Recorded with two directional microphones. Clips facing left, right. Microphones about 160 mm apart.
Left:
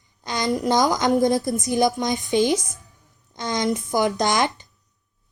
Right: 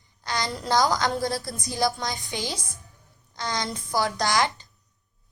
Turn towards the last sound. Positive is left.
turn(degrees=20)  # may be behind; listen again after turning